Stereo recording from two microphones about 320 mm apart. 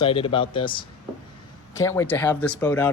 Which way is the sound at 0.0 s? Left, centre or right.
Centre.